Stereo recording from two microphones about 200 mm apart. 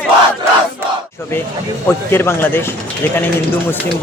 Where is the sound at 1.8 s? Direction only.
10° left (ahead or behind).